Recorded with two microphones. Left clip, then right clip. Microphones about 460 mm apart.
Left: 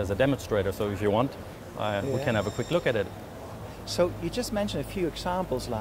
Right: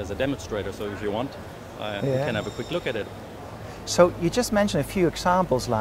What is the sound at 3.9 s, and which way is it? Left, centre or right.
Speech, right.